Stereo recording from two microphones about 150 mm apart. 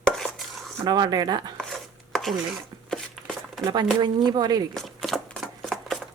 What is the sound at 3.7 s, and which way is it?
Speech, 30° right (ahead or behind).